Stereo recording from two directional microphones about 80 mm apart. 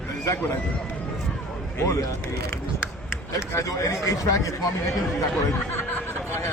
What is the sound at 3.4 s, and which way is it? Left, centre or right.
Speech, left.